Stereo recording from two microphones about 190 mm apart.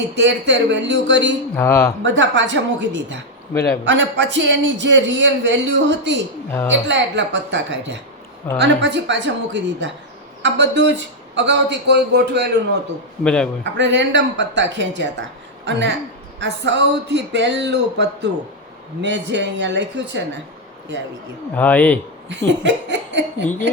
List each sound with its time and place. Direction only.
0.2 s a man's voice: 70° right (ahead or behind)
1.5 s speech: 15° left (ahead or behind)
2.0 s a man's voice: 75° right (ahead or behind)
13.2 s a man's voice: 5° left (ahead or behind)
13.7 s a man's voice: 70° right (ahead or behind)
21.5 s speech: 10° left (ahead or behind)
22.3 s a man's voice: 70° right (ahead or behind)
23.5 s speech: 10° left (ahead or behind)